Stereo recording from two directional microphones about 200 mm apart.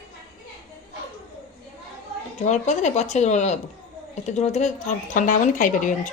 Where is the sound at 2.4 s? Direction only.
35° left (ahead or behind).